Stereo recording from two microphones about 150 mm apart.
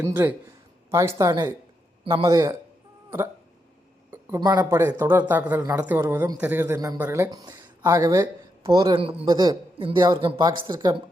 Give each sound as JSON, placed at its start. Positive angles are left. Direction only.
{"t": 0.0, "sound": "a woman's voice", "side_deg": -15}
{"t": 4.4, "sound": "a woman's voice", "side_deg": -30}
{"t": 4.7, "sound": "speech", "side_deg": -15}
{"t": 6.7, "sound": "a woman's voice", "side_deg": -25}